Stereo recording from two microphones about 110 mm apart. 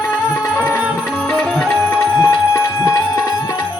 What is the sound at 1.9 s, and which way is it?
Music, 20° left (ahead or behind).